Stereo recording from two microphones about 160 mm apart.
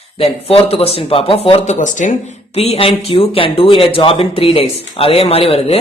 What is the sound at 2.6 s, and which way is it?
A man's voice, 40° left (ahead or behind).